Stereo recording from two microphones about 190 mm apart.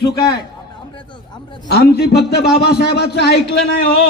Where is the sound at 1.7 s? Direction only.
55° left (ahead or behind).